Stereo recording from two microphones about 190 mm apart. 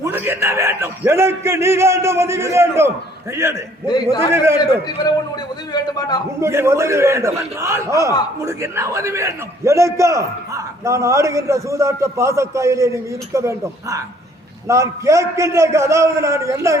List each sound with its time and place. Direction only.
0.0 s a man's voice: 10° right (ahead or behind)
5.7 s a man's voice: 20° left (ahead or behind)
6.4 s a man's voice: 15° right (ahead or behind)